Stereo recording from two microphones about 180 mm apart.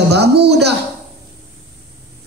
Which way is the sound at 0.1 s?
65° right (ahead or behind).